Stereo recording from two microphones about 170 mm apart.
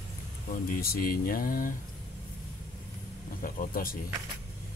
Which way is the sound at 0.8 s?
60° left (ahead or behind).